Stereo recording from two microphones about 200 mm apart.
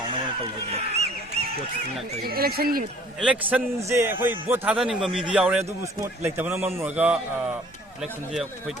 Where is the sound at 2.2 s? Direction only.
50° right (ahead or behind).